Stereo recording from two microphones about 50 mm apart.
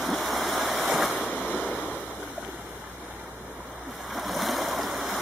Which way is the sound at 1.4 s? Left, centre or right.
Left.